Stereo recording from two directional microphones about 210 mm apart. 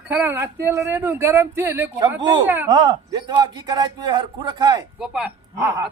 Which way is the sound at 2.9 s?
20° right (ahead or behind).